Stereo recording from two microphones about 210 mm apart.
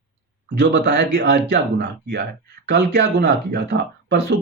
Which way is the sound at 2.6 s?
55° right (ahead or behind).